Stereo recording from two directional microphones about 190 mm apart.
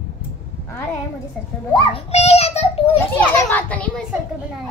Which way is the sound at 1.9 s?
35° left (ahead or behind).